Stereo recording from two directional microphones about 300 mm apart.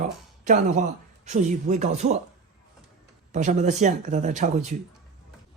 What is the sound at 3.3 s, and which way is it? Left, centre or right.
Speech, right.